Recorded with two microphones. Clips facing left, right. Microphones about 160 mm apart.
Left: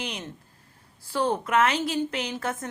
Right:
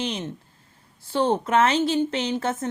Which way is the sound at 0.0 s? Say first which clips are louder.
Right 6 dB; 25° right (ahead or behind).